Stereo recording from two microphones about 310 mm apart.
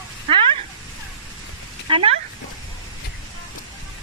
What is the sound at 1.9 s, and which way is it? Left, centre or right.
Speech, centre.